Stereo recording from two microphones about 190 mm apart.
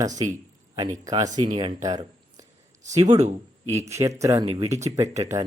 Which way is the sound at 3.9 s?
15° right (ahead or behind).